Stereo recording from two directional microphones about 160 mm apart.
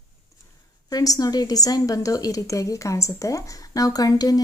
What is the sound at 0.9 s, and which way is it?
A woman's voice, 25° left (ahead or behind).